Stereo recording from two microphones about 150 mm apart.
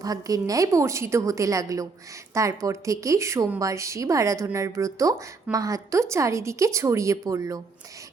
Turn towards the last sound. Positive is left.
turn(degrees=-20)  # may be behind; listen again after turning